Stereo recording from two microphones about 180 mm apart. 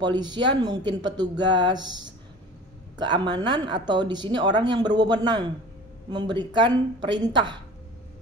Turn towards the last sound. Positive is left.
turn(degrees=-25)  # may be behind; listen again after turning